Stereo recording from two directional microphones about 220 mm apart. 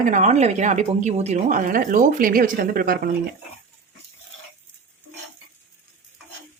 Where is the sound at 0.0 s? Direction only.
35° right (ahead or behind).